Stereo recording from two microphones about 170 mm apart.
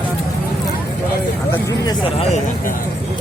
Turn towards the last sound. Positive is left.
turn(degrees=35)  # may be behind; listen again after turning